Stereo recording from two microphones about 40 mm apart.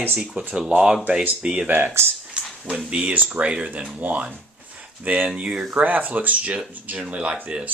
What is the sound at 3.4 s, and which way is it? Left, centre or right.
Speech, right.